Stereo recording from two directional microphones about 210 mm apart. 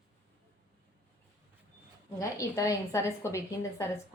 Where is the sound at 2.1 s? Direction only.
15° left (ahead or behind).